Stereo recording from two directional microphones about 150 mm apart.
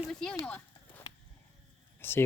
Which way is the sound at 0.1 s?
5° left (ahead or behind).